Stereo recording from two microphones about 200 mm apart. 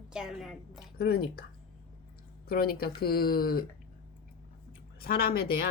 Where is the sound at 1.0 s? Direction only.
50° left (ahead or behind).